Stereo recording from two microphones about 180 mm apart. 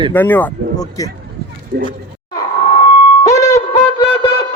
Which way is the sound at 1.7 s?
55° right (ahead or behind).